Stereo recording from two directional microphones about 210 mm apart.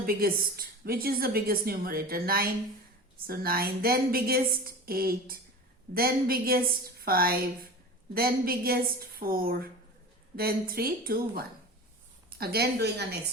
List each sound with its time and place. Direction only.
0.0 s a woman's voice: 45° right (ahead or behind)